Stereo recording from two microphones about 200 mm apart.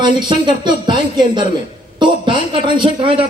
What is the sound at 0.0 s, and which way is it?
A man's voice, 20° right (ahead or behind).